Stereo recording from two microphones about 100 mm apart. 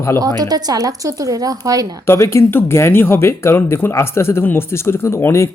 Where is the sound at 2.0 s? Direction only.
25° left (ahead or behind).